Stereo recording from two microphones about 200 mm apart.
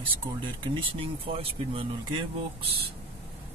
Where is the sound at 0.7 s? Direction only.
25° right (ahead or behind).